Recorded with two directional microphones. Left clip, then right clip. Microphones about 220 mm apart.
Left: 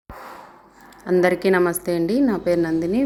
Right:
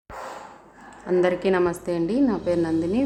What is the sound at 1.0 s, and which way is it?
A woman's voice, 20° left (ahead or behind).